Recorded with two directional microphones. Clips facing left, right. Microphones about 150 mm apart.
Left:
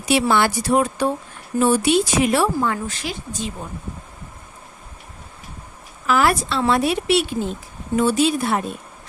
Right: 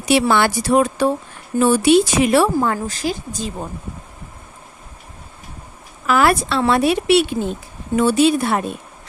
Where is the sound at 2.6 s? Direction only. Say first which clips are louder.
Right 3 dB; 40° right (ahead or behind).